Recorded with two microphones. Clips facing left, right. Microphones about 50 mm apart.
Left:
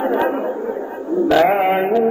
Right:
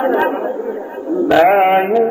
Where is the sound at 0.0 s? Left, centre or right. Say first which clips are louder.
Right 3 dB; right.